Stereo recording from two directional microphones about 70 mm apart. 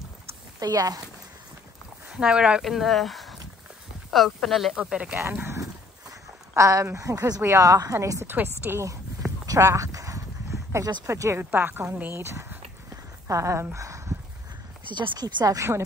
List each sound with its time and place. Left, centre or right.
0.6 s speech: right
2.0 s speech: centre
2.6 s speech: centre
4.9 s speech: centre
6.5 s a woman's voice: right
9.5 s a sound: right
11.1 s a woman's voice: right
13.7 s a sound: right
14.9 s speech: right
15.4 s a woman's voice: right